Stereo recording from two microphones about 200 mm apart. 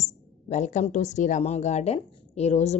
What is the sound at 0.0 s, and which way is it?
Speech, 35° left (ahead or behind).